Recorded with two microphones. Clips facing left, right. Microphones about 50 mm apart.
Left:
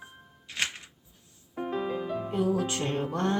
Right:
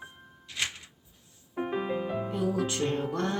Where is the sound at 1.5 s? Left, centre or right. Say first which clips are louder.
Right 1 dB; centre.